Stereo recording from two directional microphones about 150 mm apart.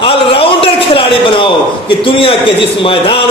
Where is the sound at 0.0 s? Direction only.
35° left (ahead or behind).